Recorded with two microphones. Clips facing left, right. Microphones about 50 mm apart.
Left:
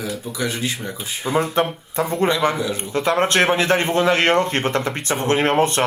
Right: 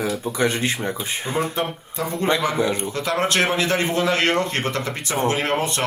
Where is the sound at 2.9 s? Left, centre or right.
Left.